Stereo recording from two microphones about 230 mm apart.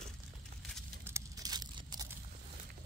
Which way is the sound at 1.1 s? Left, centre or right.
Centre.